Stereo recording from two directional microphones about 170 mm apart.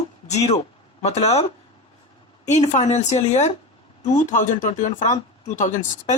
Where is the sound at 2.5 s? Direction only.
40° left (ahead or behind).